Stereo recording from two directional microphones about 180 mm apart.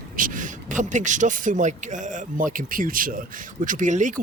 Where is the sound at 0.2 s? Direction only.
45° right (ahead or behind).